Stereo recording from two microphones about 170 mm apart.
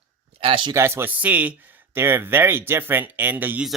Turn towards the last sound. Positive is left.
turn(degrees=-10)  # may be behind; listen again after turning